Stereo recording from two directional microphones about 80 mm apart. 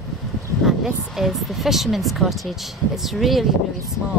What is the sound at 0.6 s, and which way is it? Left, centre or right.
Speech, centre.